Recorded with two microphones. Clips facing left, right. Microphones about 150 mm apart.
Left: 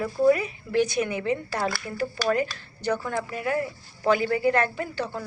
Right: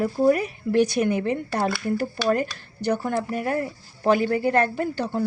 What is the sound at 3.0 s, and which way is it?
A woman's voice, 50° right (ahead or behind).